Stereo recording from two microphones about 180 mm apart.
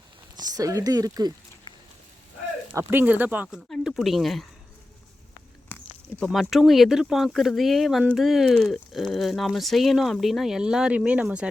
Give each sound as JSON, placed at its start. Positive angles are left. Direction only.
{"t": 0.3, "sound": "speech", "side_deg": -20}
{"t": 2.7, "sound": "speech", "side_deg": -10}
{"t": 6.1, "sound": "speech", "side_deg": 5}